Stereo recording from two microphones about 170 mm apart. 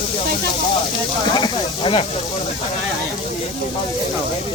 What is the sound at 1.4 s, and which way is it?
Speech, 25° left (ahead or behind).